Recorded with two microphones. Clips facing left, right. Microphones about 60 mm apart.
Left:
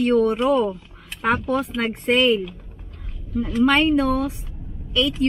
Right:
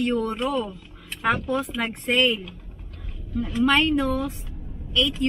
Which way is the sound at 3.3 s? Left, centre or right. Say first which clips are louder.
Left 3 dB; centre.